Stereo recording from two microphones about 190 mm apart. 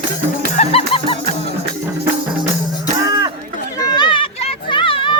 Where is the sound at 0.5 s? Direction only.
35° left (ahead or behind).